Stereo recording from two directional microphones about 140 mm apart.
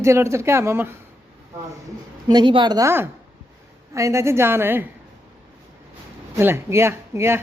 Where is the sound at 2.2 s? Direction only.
35° right (ahead or behind); by 4.9 s 15° right (ahead or behind).